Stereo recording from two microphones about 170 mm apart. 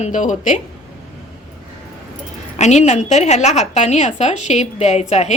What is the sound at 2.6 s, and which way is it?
A woman's voice, 40° left (ahead or behind).